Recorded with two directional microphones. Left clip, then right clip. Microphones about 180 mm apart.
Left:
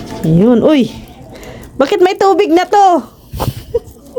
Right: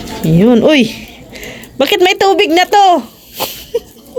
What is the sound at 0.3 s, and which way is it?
A woman's voice, 20° left (ahead or behind).